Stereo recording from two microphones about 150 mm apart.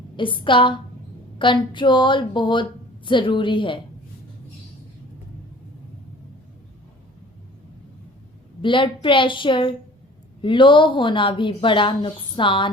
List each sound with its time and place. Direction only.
0.2 s a woman's voice: 35° left (ahead or behind)
8.6 s a woman's voice: 35° left (ahead or behind)